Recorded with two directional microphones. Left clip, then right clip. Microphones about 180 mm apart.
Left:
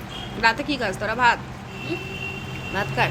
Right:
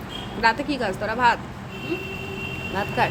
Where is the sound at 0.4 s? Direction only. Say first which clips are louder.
Even; centre (ahead or behind).